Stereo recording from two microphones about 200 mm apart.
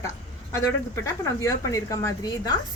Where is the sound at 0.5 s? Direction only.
15° left (ahead or behind).